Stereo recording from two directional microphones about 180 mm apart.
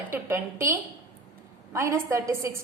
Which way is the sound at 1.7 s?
15° right (ahead or behind).